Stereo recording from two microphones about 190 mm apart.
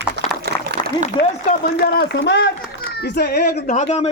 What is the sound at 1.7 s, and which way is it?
Speech, 60° left (ahead or behind).